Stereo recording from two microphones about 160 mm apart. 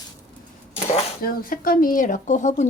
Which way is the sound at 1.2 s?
65° left (ahead or behind).